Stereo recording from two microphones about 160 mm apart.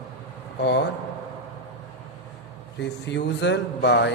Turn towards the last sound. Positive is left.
turn(degrees=90)